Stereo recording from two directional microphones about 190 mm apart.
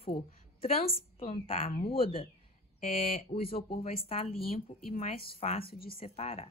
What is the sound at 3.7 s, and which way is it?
Speech, 50° left (ahead or behind).